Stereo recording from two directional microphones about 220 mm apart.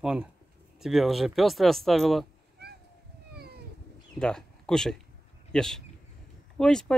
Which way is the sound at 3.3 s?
45° right (ahead or behind).